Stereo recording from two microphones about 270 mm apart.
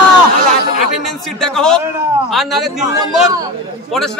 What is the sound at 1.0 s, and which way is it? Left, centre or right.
A man's voice, centre.